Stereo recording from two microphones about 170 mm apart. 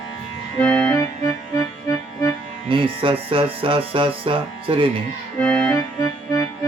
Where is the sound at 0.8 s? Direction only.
20° left (ahead or behind).